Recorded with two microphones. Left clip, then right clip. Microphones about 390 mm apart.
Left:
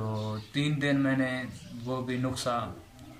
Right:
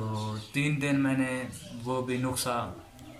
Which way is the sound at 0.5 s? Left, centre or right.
Centre.